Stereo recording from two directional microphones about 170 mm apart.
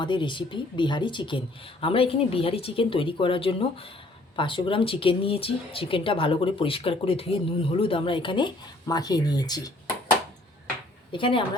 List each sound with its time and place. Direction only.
0.0 s speech: 30° left (ahead or behind)
11.1 s speech: 30° left (ahead or behind)